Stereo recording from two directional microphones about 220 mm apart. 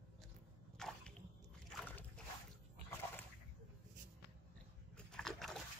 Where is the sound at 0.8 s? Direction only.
5° left (ahead or behind).